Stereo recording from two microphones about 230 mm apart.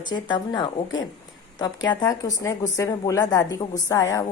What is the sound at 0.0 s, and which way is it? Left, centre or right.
A woman's voice, centre.